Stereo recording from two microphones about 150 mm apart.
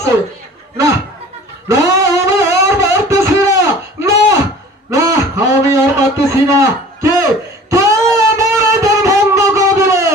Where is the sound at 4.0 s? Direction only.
20° right (ahead or behind).